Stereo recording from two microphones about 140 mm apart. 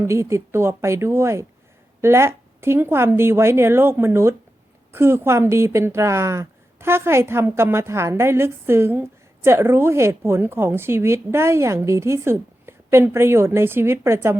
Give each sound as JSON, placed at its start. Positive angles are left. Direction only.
{"t": 0.0, "sound": "speech", "side_deg": -20}